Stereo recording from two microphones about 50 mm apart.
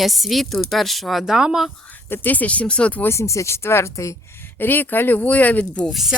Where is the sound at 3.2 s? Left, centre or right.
Left.